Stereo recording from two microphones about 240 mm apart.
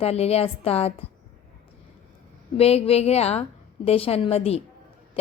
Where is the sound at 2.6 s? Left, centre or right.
Left.